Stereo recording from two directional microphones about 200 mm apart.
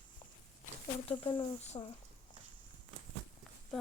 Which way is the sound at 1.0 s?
25° left (ahead or behind).